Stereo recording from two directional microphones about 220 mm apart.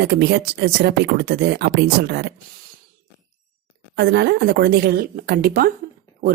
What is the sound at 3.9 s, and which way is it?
Speech, 45° right (ahead or behind).